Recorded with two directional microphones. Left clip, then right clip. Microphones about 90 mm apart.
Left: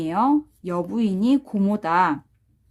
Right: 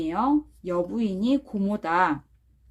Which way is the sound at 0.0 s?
55° left (ahead or behind).